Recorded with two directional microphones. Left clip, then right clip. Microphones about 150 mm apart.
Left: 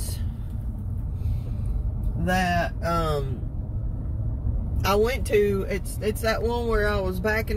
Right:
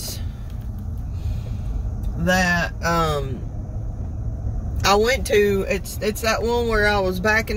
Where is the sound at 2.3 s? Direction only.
40° right (ahead or behind).